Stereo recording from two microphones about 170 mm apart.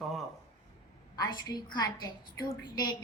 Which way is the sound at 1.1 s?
25° left (ahead or behind).